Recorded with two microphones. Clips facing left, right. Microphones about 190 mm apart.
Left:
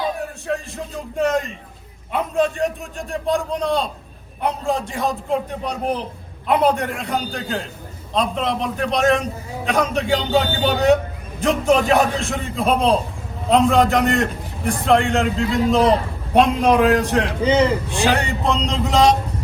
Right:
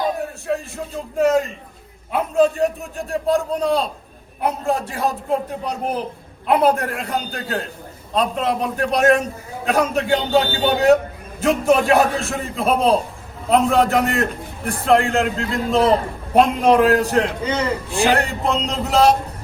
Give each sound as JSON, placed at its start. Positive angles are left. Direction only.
{"t": 1.1, "sound": "a man's voice", "side_deg": 0}
{"t": 17.4, "sound": "a man's voice", "side_deg": 30}
{"t": 18.1, "sound": "a man's voice", "side_deg": 0}